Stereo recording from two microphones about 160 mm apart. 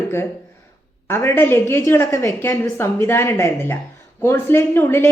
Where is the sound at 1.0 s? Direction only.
15° left (ahead or behind).